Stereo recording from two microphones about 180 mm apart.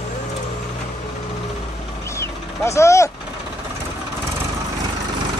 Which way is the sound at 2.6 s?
15° left (ahead or behind).